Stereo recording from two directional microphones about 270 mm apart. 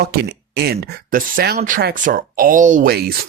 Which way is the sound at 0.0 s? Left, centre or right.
Right.